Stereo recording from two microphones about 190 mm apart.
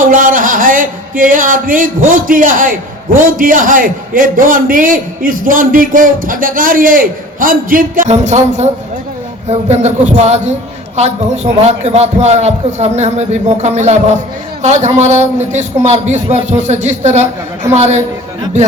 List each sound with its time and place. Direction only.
0.0 s a man's voice: 45° right (ahead or behind)